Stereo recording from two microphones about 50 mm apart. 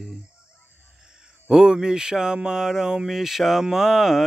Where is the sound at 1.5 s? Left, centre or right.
Centre.